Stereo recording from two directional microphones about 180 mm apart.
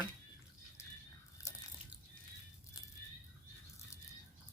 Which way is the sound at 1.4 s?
15° left (ahead or behind).